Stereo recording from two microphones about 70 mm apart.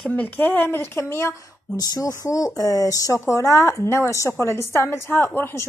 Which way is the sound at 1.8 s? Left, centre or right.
Left.